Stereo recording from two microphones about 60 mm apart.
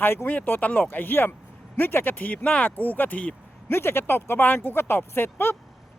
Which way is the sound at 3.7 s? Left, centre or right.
Left.